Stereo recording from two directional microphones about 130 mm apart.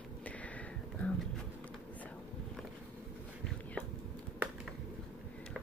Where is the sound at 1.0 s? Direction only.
10° left (ahead or behind).